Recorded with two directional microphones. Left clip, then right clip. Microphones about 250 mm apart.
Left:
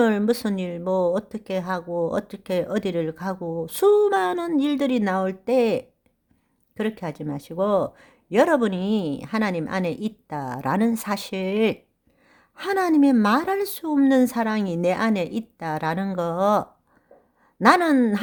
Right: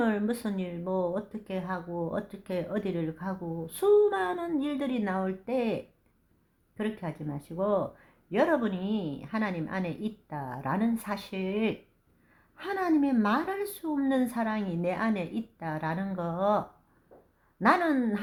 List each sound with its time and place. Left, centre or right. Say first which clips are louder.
0.0 s speech: left 9 dB; left